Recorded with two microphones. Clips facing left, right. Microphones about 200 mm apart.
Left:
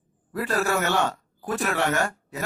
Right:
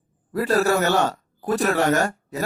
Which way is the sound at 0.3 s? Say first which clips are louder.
Right 5 dB; 40° right (ahead or behind).